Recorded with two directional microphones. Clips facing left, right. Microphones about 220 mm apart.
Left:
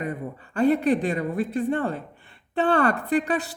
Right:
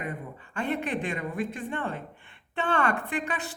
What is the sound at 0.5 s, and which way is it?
Speech, 35° left (ahead or behind).